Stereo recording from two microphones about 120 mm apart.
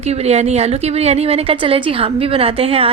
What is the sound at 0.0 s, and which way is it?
Speech, 65° right (ahead or behind).